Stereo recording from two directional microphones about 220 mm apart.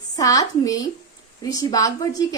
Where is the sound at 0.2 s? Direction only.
15° left (ahead or behind).